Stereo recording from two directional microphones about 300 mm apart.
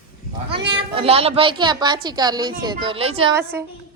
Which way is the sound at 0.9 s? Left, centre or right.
Centre.